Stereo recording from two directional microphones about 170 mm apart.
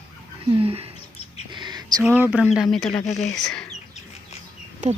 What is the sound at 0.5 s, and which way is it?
Speech, 35° right (ahead or behind).